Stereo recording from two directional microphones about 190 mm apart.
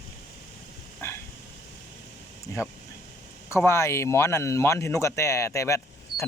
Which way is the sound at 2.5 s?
15° left (ahead or behind).